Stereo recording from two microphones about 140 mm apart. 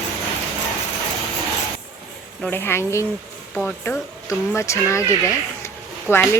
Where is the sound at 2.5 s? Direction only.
15° left (ahead or behind).